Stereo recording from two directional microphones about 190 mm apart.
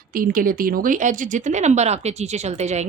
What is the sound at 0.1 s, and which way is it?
A woman's voice, 45° right (ahead or behind).